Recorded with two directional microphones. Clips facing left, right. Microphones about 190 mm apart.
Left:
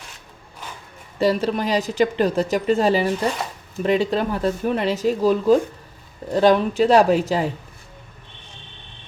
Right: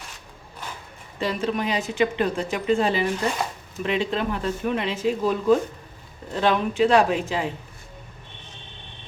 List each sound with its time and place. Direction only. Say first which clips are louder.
1.2 s a woman's voice: left 5 dB; 40° left (ahead or behind)